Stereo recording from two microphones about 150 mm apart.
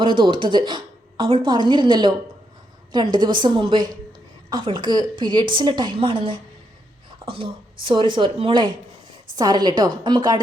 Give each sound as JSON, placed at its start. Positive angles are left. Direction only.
{"t": 0.0, "sound": "a woman's voice", "side_deg": -35}